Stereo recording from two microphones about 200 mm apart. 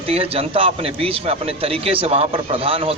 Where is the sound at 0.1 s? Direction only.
30° right (ahead or behind).